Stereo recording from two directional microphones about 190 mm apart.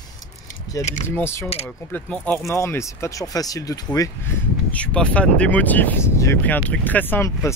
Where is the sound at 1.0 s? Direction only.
10° left (ahead or behind).